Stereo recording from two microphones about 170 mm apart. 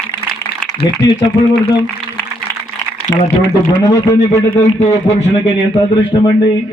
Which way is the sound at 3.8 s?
20° left (ahead or behind).